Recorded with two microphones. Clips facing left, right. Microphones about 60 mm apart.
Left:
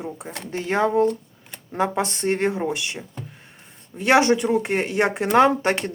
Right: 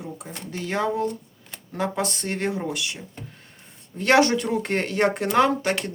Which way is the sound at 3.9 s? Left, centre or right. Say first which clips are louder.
Left 1 dB; centre.